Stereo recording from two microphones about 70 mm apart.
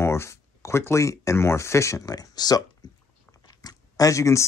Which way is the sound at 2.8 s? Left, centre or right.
Left.